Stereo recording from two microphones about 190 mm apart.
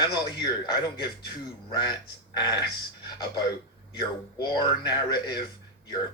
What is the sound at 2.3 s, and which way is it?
Speech, 20° left (ahead or behind).